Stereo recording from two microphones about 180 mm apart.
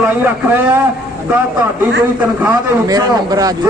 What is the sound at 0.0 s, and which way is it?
Speech, 10° right (ahead or behind).